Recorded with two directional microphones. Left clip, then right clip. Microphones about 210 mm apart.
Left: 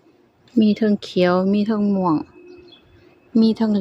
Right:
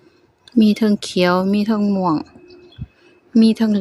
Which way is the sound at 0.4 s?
5° right (ahead or behind).